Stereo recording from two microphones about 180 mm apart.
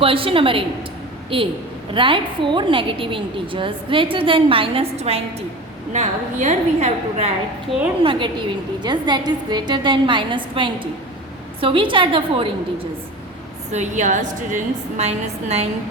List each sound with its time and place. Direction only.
0.0 s a woman's voice: 30° right (ahead or behind)
13.7 s a woman's voice: 40° right (ahead or behind)